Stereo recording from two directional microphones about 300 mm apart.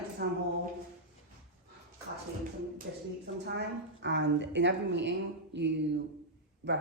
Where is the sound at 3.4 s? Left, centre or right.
Right.